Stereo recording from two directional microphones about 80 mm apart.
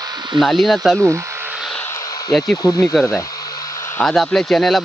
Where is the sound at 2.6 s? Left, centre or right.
Left.